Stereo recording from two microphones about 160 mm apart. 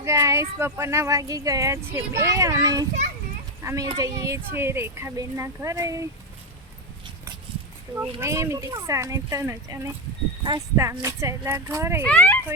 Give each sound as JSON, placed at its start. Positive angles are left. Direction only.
{"t": 0.0, "sound": "a woman's voice", "side_deg": -20}
{"t": 7.9, "sound": "speech", "side_deg": -15}
{"t": 12.0, "sound": "speech", "side_deg": 10}